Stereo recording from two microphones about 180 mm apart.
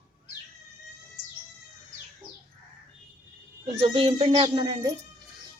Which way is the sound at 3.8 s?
30° right (ahead or behind).